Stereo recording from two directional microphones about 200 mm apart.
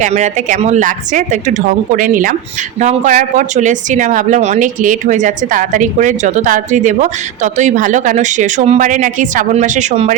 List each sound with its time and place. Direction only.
0.0 s speech: 35° right (ahead or behind)